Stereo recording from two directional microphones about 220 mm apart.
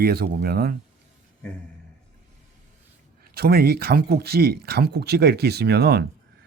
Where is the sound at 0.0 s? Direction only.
45° right (ahead or behind).